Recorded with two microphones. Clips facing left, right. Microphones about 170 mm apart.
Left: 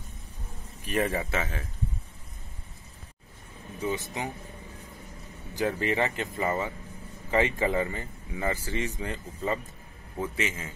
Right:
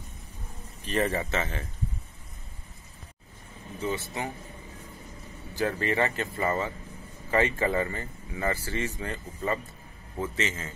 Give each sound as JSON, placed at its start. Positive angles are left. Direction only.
{"t": 0.8, "sound": "speech", "side_deg": 10}
{"t": 3.8, "sound": "speech", "side_deg": 15}
{"t": 5.6, "sound": "speech", "side_deg": 15}